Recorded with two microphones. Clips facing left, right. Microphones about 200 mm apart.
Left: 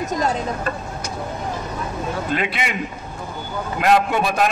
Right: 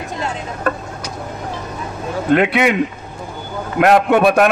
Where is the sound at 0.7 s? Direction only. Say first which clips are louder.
Right 6 dB; 60° right (ahead or behind).